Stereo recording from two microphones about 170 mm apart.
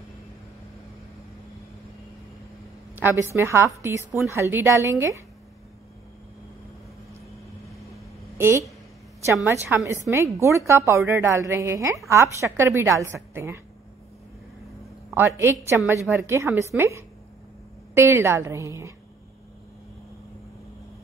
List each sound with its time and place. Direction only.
3.0 s a woman's voice: 15° right (ahead or behind)
8.4 s a woman's voice: 15° right (ahead or behind)
15.1 s a woman's voice: 15° right (ahead or behind)